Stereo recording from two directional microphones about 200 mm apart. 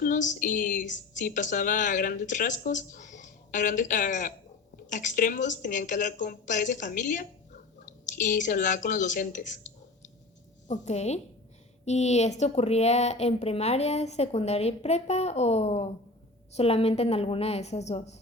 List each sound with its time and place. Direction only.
0.0 s a woman's voice: 40° left (ahead or behind)